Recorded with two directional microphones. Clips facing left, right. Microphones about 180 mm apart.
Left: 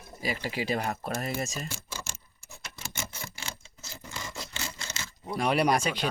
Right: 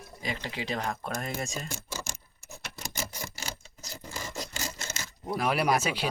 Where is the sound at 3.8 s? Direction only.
35° right (ahead or behind).